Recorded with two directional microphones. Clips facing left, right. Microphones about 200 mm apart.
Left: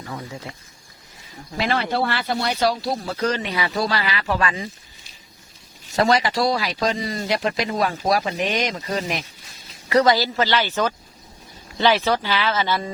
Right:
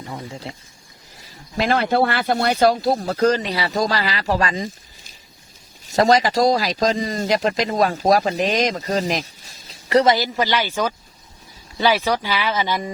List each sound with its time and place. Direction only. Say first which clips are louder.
1.5 s speech: right 4 dB; 45° right (ahead or behind)
5.8 s speech: right 3 dB; 40° right (ahead or behind)
9.9 s speech: right 1 dB; 25° right (ahead or behind)